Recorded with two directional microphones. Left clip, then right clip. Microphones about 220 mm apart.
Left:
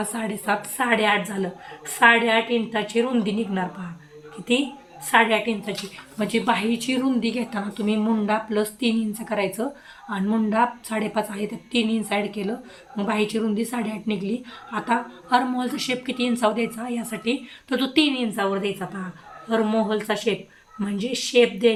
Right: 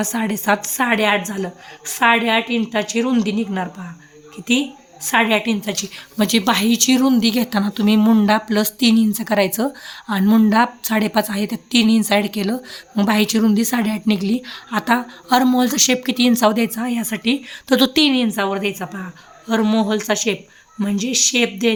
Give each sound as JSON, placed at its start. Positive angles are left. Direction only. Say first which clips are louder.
{"t": 0.0, "sound": "a woman's voice", "louder": "right 6 dB", "side_deg": -45}
{"t": 5.0, "sound": "a woman's voice", "louder": "right 2 dB", "side_deg": -40}